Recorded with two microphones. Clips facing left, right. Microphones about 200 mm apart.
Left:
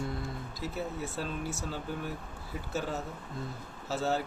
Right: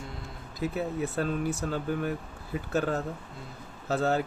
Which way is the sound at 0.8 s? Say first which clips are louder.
Right 5 dB; 60° right (ahead or behind).